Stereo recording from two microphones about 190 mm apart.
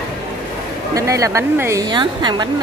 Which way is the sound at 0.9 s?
15° right (ahead or behind).